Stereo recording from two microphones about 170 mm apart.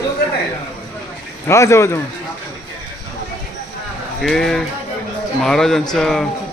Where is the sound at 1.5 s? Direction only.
15° left (ahead or behind).